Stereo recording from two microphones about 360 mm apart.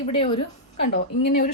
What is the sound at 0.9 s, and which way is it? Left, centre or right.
Speech, left.